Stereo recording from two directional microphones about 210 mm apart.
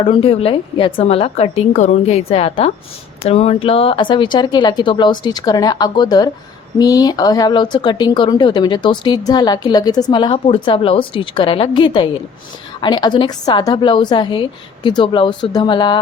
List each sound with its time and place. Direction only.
0.0 s speech: 25° left (ahead or behind)